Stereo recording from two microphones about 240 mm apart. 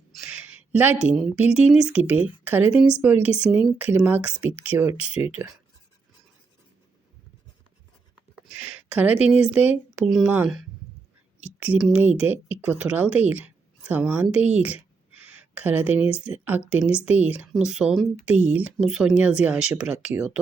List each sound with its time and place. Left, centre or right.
0.1 s speech: centre
8.5 s a woman's voice: centre
14.6 s a sound: centre
16.2 s speech: centre